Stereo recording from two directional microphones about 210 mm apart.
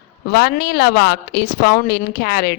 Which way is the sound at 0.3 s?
50° left (ahead or behind).